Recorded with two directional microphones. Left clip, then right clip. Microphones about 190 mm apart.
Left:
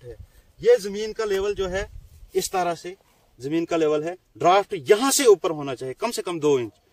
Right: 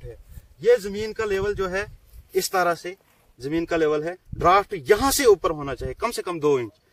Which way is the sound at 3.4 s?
15° left (ahead or behind).